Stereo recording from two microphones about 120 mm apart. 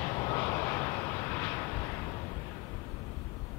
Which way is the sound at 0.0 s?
20° left (ahead or behind).